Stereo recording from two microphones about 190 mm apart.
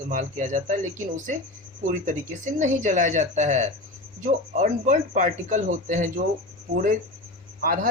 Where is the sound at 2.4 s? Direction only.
40° right (ahead or behind).